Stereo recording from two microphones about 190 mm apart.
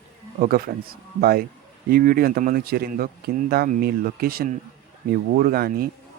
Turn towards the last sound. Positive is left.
turn(degrees=-50)  # may be behind; listen again after turning